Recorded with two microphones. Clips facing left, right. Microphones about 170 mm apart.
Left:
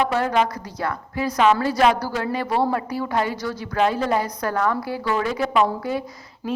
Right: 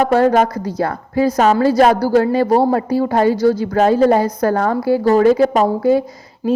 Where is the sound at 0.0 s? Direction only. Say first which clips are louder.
Right 8 dB; 45° right (ahead or behind).